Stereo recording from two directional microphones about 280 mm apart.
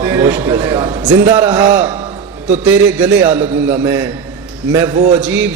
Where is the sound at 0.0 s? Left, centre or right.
Centre.